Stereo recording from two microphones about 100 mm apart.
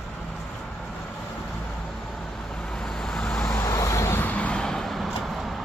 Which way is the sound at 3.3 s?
15° left (ahead or behind).